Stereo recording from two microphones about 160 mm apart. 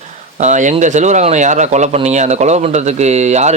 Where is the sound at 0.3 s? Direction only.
50° right (ahead or behind).